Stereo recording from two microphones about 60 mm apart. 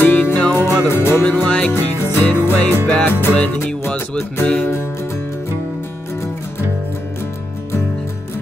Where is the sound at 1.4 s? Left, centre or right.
Left.